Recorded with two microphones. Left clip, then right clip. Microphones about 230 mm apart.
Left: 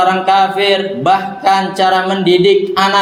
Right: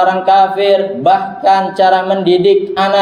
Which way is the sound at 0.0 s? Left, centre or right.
Left.